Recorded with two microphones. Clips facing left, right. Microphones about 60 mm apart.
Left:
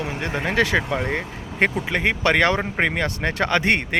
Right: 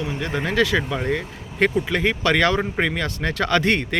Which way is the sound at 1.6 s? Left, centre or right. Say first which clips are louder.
Right 1 dB; left.